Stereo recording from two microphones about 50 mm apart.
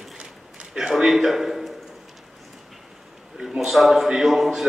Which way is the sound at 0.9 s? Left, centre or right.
Centre.